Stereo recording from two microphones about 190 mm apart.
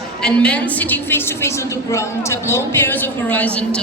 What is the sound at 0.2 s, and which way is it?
A woman's voice, 5° left (ahead or behind).